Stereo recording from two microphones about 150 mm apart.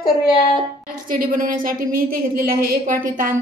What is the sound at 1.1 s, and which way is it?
A woman's voice, 65° right (ahead or behind).